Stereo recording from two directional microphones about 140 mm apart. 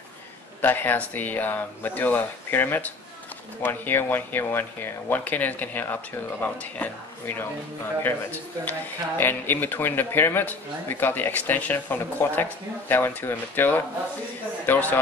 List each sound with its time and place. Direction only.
0.6 s speech: 15° left (ahead or behind)